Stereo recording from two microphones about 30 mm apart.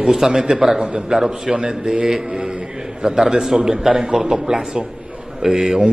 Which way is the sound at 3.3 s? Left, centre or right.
Centre.